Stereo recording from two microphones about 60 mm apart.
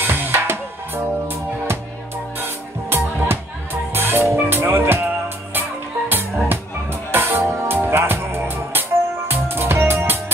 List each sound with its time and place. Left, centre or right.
0.0 s music: right